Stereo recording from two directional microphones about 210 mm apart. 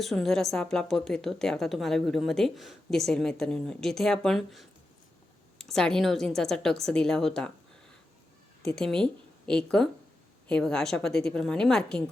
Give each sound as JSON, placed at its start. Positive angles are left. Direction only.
{"t": 0.0, "sound": "a woman's voice", "side_deg": 0}
{"t": 8.6, "sound": "a woman's voice", "side_deg": 5}